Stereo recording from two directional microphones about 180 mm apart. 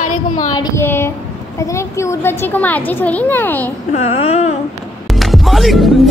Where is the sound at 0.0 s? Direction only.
45° left (ahead or behind).